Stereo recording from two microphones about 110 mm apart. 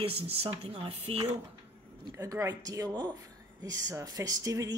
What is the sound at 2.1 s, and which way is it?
Speech, 30° right (ahead or behind).